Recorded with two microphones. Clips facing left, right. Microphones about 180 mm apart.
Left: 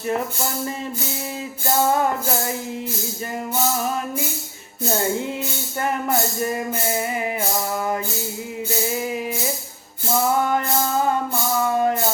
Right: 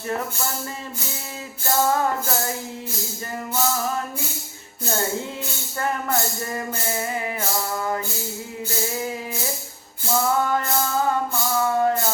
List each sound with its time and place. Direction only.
5.8 s speech: 15° left (ahead or behind)
11.7 s music: 20° left (ahead or behind)